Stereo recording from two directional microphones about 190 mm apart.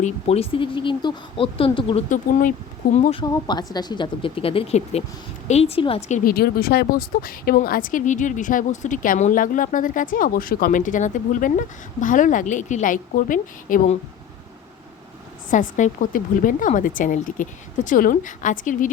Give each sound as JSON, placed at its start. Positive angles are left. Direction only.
{"t": 0.0, "sound": "speech", "side_deg": 30}
{"t": 2.0, "sound": "a woman's voice", "side_deg": 40}
{"t": 3.2, "sound": "a woman's voice", "side_deg": 20}
{"t": 6.3, "sound": "speech", "side_deg": 55}
{"t": 15.4, "sound": "speech", "side_deg": 40}